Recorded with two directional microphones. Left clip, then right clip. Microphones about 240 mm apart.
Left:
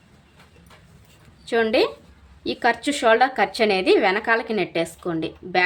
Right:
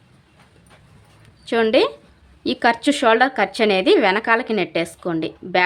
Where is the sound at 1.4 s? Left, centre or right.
Right.